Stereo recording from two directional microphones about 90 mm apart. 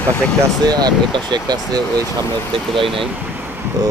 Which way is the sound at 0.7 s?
50° right (ahead or behind).